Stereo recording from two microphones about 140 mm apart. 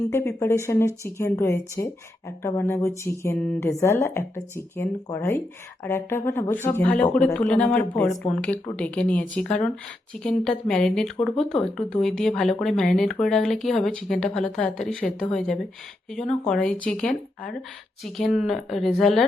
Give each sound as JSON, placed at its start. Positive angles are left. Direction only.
{"t": 0.1, "sound": "a woman's voice", "side_deg": 20}
{"t": 16.6, "sound": "a woman's voice", "side_deg": 10}